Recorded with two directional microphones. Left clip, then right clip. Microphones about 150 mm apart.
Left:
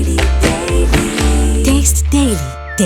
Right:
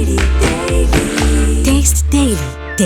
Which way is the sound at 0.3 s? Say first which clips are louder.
Even; centre (ahead or behind).